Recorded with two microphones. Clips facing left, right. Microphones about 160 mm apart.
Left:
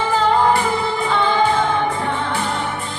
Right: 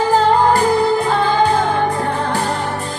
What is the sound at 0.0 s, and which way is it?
Music, 40° right (ahead or behind).